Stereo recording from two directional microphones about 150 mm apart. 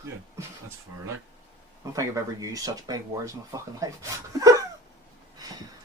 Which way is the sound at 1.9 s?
20° right (ahead or behind).